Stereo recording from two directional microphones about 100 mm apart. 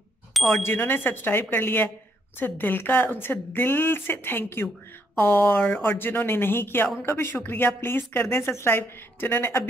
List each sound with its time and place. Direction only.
0.5 s a woman's voice: 20° left (ahead or behind)